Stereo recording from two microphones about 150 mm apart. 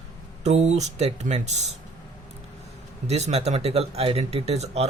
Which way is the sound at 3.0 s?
45° right (ahead or behind).